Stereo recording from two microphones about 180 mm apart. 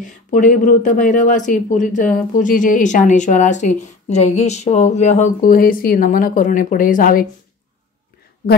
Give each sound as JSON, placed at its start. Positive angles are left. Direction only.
{"t": 0.0, "sound": "speech", "side_deg": 45}